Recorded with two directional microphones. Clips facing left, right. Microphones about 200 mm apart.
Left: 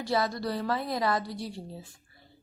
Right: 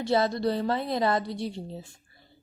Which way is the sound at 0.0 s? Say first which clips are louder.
Right 4 dB; 25° right (ahead or behind).